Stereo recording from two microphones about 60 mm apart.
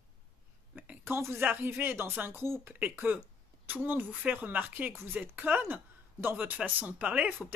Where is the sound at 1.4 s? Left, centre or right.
Right.